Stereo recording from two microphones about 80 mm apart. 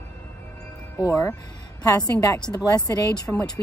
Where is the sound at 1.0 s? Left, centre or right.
Left.